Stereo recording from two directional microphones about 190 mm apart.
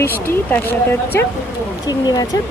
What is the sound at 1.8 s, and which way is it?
Speech, 20° left (ahead or behind).